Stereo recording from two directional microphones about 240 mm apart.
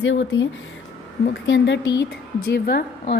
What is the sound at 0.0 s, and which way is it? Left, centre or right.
Speech, left.